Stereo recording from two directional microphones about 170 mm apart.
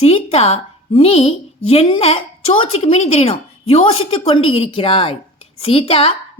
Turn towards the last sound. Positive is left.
turn(degrees=35)  # may be behind; listen again after turning